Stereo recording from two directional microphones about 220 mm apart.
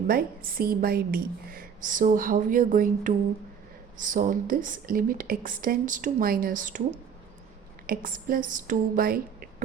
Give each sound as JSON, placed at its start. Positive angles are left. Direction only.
{"t": 0.1, "sound": "a woman's voice", "side_deg": -40}